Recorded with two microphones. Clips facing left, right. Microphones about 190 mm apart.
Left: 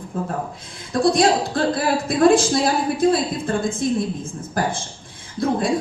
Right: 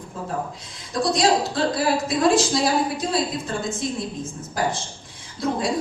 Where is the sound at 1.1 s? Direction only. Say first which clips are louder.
Left 2 dB; 55° left (ahead or behind).